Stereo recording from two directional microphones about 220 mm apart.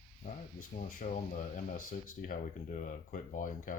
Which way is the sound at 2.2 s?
35° left (ahead or behind).